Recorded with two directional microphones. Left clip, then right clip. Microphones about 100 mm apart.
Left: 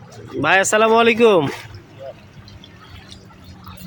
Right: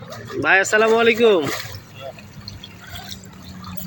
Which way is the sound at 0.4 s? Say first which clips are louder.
Left 1 dB; 55° left (ahead or behind).